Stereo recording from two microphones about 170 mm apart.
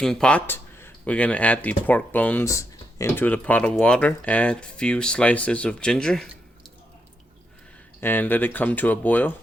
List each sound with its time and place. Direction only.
0.0 s speech: 5° left (ahead or behind)
8.0 s speech: 10° left (ahead or behind)